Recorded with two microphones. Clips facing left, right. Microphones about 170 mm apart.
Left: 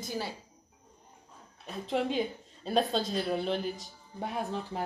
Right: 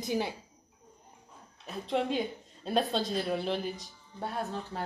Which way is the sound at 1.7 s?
Centre (ahead or behind).